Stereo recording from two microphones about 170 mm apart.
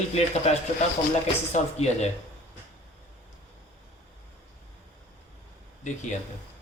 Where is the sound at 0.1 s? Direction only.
40° left (ahead or behind).